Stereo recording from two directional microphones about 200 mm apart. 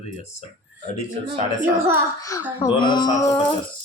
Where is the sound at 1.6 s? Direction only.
10° right (ahead or behind).